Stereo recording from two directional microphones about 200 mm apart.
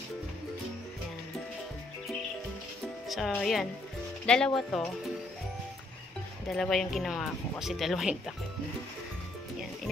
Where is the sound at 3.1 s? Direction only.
Centre (ahead or behind).